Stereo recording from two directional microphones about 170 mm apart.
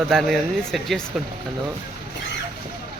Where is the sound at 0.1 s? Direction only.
Centre (ahead or behind).